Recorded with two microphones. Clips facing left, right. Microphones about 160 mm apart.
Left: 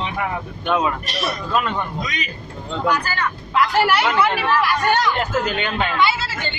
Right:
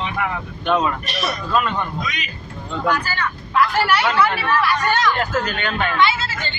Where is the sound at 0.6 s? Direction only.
15° left (ahead or behind).